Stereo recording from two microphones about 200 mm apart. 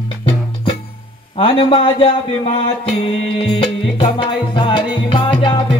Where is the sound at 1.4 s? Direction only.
25° left (ahead or behind).